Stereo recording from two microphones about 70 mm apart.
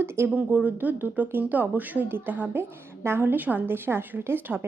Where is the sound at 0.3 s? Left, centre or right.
Right.